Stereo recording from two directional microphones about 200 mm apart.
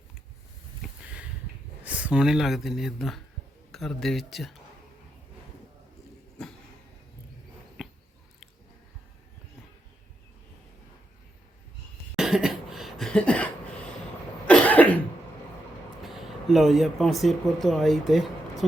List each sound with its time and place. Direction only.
1.8 s speech: 5° right (ahead or behind)
7.8 s a sound: centre (ahead or behind)
12.1 s cough: centre (ahead or behind)
16.0 s speech: centre (ahead or behind)